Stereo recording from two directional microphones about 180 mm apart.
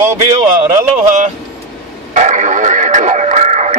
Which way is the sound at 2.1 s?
40° right (ahead or behind).